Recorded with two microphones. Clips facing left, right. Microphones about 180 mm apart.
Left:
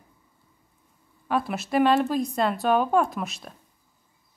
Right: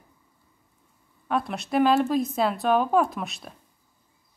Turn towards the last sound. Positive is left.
turn(degrees=0)  # may be behind; listen again after turning